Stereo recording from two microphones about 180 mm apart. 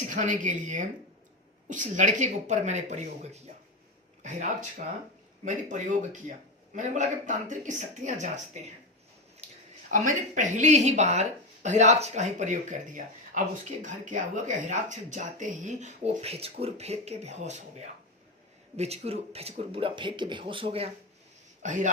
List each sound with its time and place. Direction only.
0.1 s speech: 45° right (ahead or behind)
5.5 s speech: 45° right (ahead or behind)
9.9 s speech: 45° right (ahead or behind); by 20.9 s 30° right (ahead or behind)
21.6 s speech: 45° right (ahead or behind)